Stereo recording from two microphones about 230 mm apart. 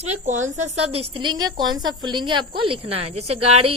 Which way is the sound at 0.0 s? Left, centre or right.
Right.